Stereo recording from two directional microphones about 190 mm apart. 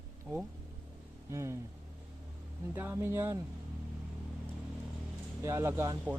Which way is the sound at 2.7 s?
10° right (ahead or behind).